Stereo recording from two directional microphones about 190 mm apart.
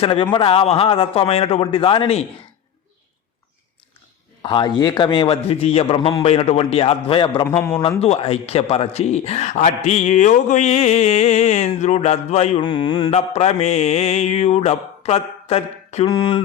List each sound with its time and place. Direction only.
0.0 s a man's voice: 25° left (ahead or behind)
4.4 s a man's voice: 25° left (ahead or behind)
7.4 s a man's voice: 15° left (ahead or behind)
7.8 s speech: 30° left (ahead or behind)
12.6 s a man's voice: 20° left (ahead or behind)
13.1 s speech: 35° left (ahead or behind)
16.0 s a man's voice: 25° left (ahead or behind)